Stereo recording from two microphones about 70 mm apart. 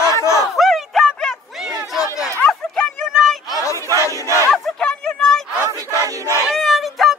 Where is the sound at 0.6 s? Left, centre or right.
Centre.